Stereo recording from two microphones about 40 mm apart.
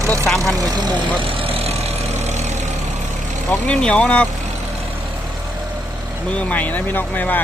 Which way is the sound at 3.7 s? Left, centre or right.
Left.